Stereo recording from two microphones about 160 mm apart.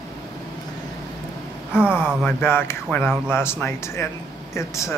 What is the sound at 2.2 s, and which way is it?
Speech, 15° left (ahead or behind).